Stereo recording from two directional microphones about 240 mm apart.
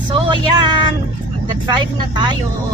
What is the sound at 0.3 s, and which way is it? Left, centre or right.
Speech, centre.